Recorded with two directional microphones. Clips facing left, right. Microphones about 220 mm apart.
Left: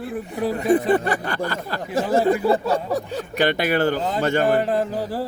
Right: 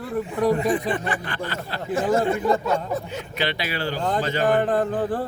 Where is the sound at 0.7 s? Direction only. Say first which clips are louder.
Left 5 dB; 45° left (ahead or behind).